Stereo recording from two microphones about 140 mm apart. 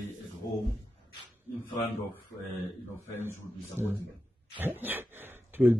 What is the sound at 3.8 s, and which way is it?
Speech, 15° right (ahead or behind).